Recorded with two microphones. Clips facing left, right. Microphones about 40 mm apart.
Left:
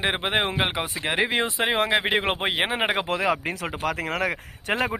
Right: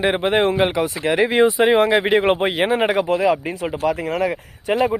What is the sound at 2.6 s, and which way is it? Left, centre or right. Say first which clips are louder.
Speech: right 5 dB; centre.